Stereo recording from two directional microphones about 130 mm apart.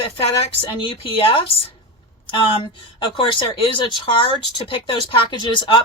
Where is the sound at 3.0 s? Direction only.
40° left (ahead or behind).